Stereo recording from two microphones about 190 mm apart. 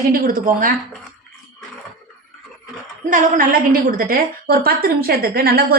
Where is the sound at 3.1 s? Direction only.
45° right (ahead or behind).